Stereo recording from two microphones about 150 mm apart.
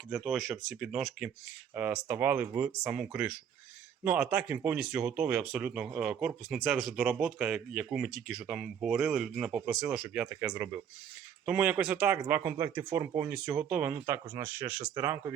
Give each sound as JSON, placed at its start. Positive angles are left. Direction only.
{"t": 0.1, "sound": "speech", "side_deg": 0}
{"t": 13.3, "sound": "speech", "side_deg": -5}